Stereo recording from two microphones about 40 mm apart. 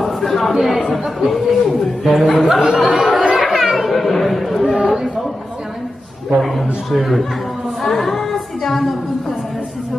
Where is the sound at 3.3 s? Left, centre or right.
Centre.